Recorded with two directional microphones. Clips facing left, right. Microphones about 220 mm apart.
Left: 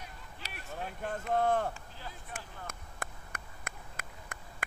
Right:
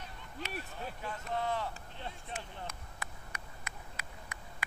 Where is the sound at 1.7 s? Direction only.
30° right (ahead or behind).